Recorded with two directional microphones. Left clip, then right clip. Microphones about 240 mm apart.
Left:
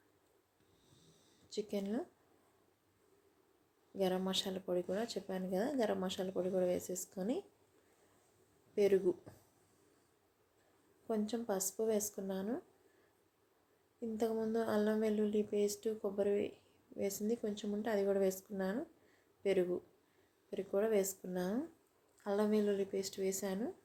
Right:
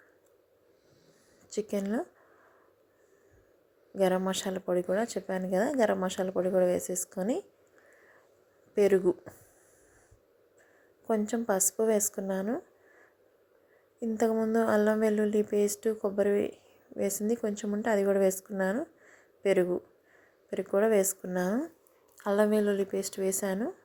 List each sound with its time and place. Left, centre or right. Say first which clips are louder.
1.5 s speech: right 8 dB; right
3.9 s a woman's voice: right 9 dB; right
8.7 s a woman's voice: right 7 dB; right
11.0 s a woman's voice: right 9 dB; right
14.2 s a woman's voice: right 9 dB; right